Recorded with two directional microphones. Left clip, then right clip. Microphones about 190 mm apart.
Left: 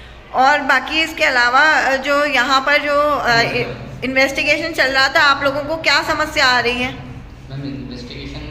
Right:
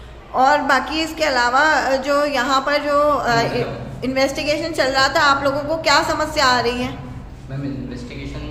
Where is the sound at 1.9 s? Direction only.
10° right (ahead or behind).